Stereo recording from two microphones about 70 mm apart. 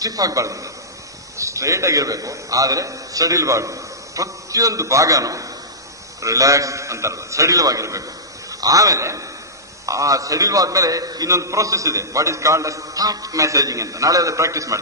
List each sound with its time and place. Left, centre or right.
0.0 s a man's voice: right
11.2 s a man's voice: right